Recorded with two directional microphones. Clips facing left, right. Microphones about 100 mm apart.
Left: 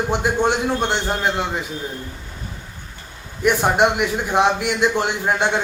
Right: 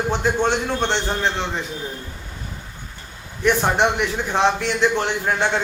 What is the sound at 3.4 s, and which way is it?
A man's voice, 10° left (ahead or behind).